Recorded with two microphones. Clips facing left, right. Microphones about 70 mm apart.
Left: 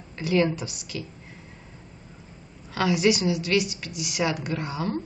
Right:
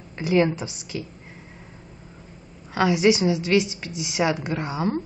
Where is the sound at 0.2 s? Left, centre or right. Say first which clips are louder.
Right 3 dB; right.